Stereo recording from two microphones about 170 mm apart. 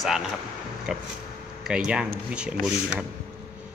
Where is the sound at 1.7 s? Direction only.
5° right (ahead or behind).